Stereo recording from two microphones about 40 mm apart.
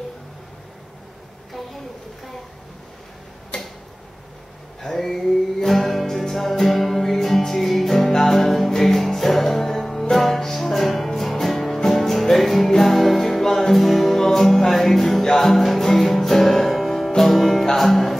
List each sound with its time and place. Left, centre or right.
3.5 s tick-tock: centre
4.8 s music: centre